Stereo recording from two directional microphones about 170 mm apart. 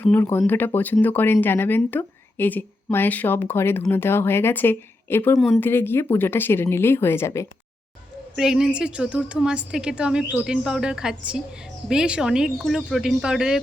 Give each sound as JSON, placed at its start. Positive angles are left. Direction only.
{"t": 0.0, "sound": "speech", "side_deg": 10}
{"t": 8.4, "sound": "a woman's voice", "side_deg": -5}